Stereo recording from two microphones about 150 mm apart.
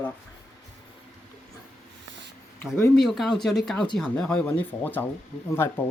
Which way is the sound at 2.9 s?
Centre (ahead or behind).